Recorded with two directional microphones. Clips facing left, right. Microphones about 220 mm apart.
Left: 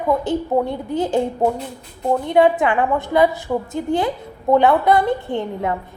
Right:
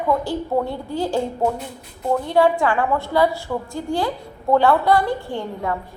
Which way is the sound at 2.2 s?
20° left (ahead or behind).